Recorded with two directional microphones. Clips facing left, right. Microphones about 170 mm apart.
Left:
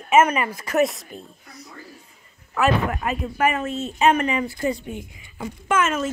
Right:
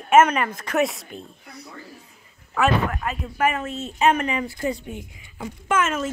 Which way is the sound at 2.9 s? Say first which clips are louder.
Left 2 dB; 15° left (ahead or behind).